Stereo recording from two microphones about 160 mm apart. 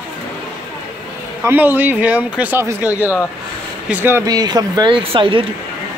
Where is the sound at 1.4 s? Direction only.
15° right (ahead or behind); by 5.5 s 35° right (ahead or behind).